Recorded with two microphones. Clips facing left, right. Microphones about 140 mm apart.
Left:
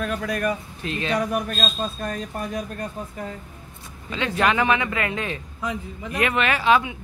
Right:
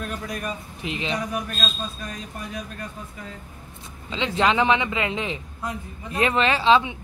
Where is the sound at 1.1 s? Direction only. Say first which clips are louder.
Left 4 dB; 50° left (ahead or behind).